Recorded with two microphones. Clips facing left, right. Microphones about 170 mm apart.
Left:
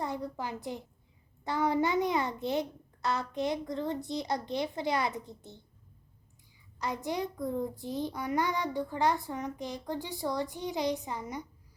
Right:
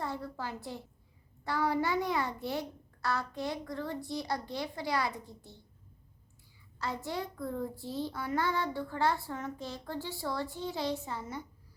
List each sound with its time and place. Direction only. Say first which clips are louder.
0.0 s a woman's voice: left 2 dB; 20° left (ahead or behind)
6.7 s child singing: left 3 dB; 15° left (ahead or behind)